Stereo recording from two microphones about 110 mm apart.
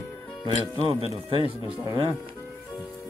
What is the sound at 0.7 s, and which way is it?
Speech, 55° right (ahead or behind).